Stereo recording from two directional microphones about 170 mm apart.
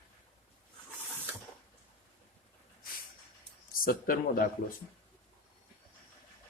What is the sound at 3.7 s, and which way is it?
Speech, 55° left (ahead or behind).